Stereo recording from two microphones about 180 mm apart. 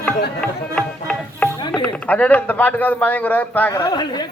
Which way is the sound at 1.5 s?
25° left (ahead or behind).